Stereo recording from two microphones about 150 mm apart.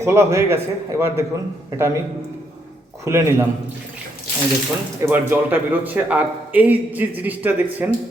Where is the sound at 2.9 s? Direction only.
20° right (ahead or behind).